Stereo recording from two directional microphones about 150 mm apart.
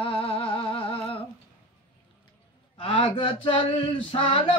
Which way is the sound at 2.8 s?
35° left (ahead or behind).